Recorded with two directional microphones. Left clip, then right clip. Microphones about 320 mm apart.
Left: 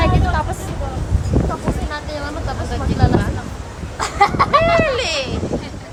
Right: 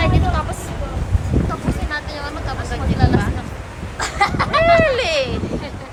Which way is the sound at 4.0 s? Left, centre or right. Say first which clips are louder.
Left 3 dB; left.